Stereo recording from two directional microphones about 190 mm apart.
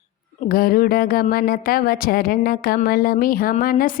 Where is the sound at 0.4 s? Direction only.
50° left (ahead or behind).